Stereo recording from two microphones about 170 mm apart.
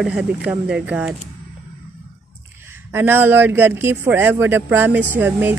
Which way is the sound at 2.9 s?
15° right (ahead or behind).